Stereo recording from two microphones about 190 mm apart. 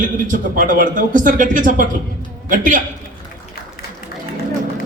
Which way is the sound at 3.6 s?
55° left (ahead or behind).